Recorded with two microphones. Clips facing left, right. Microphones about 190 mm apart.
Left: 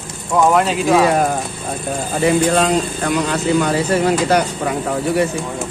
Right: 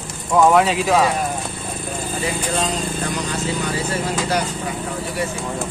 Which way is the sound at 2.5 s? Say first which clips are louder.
Left 6 dB; 65° left (ahead or behind).